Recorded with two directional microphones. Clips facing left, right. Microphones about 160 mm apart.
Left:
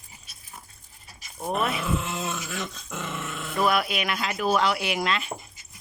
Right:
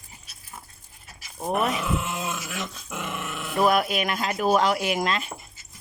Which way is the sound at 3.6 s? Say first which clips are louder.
Right 3 dB; 40° right (ahead or behind).